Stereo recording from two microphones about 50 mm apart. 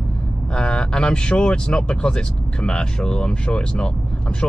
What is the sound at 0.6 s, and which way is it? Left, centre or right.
Speech, centre.